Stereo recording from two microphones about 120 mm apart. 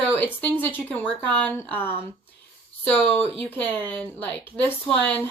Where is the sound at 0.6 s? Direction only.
15° left (ahead or behind).